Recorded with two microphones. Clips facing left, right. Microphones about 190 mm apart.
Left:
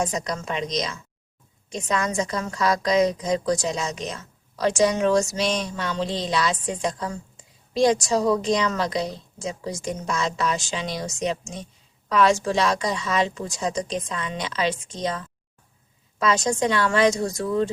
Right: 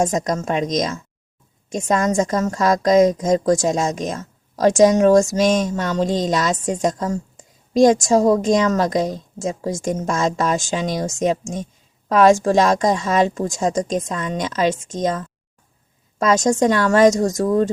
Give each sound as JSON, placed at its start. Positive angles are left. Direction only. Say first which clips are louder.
{"t": 0.0, "sound": "a woman's voice", "louder": "right 7 dB", "side_deg": -45}